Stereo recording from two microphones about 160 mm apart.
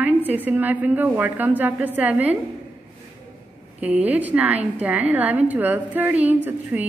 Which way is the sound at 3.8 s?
10° right (ahead or behind).